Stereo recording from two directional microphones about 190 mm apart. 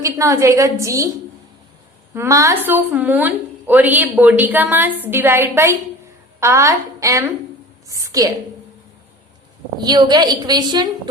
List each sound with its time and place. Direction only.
0.0 s a woman's voice: 15° right (ahead or behind)
2.1 s a woman's voice: 15° right (ahead or behind)
7.9 s a sound: 15° right (ahead or behind)
9.8 s a woman's voice: 20° right (ahead or behind)